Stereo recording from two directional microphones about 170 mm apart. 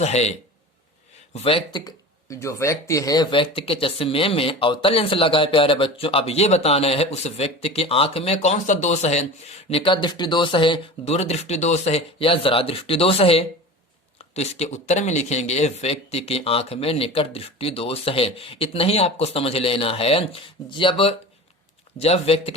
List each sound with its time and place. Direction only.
0.0 s speech: 40° left (ahead or behind)